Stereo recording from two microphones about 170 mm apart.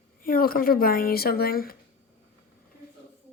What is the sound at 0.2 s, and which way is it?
Speech, 60° left (ahead or behind).